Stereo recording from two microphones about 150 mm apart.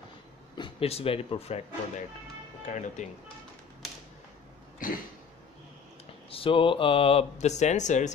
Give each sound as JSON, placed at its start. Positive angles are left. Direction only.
{"t": 0.6, "sound": "speech", "side_deg": 35}
{"t": 2.6, "sound": "speech", "side_deg": 55}
{"t": 4.8, "sound": "a sound", "side_deg": 65}
{"t": 6.3, "sound": "speech", "side_deg": 35}